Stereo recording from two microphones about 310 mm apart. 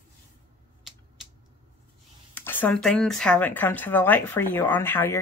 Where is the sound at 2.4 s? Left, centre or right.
Centre.